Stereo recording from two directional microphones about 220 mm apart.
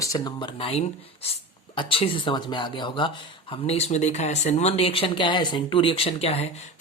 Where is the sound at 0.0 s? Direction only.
15° left (ahead or behind).